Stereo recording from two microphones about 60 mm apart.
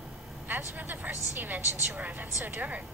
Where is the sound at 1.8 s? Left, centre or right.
Right.